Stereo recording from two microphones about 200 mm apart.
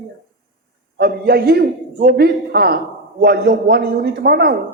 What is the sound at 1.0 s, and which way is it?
A man's voice, 50° right (ahead or behind).